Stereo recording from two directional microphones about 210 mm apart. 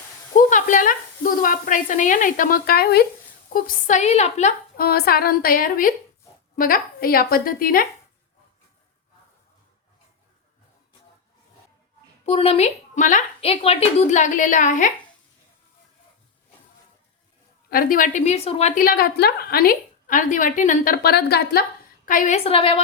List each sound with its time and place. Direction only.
0.3 s a woman's voice: 40° left (ahead or behind)
12.2 s a woman's voice: 30° left (ahead or behind)
17.7 s a woman's voice: 40° left (ahead or behind)
22.0 s a woman's voice: 40° left (ahead or behind)